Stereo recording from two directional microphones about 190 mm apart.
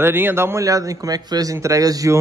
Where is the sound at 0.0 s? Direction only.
10° right (ahead or behind).